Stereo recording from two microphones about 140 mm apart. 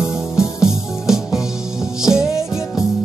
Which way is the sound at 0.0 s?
5° right (ahead or behind).